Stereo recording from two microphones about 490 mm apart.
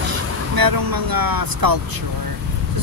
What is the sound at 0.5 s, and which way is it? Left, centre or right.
Speech, right.